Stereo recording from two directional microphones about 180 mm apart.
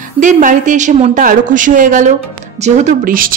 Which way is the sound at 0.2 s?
45° right (ahead or behind).